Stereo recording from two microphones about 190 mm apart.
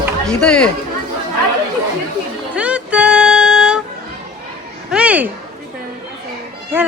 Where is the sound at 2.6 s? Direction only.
5° right (ahead or behind).